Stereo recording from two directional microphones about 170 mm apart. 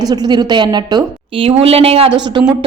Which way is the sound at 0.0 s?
25° right (ahead or behind).